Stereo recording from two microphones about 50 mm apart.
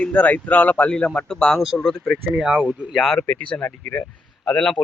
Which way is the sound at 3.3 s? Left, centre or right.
Left.